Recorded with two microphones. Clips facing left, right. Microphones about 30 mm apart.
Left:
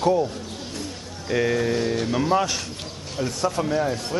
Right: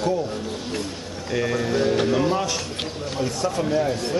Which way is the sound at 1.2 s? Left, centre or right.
Centre.